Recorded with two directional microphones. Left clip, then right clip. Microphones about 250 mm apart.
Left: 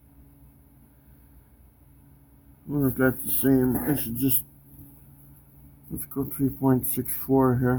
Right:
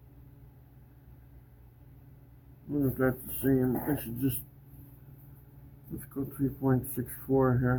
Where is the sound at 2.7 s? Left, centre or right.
Left.